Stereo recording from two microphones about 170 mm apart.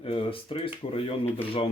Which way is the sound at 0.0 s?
35° left (ahead or behind).